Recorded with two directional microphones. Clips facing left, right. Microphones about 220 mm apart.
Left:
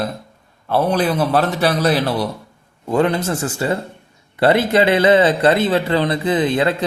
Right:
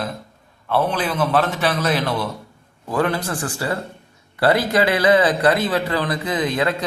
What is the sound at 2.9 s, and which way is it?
A man's voice, 25° left (ahead or behind).